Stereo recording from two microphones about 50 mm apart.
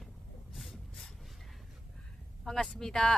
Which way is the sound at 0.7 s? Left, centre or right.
Centre.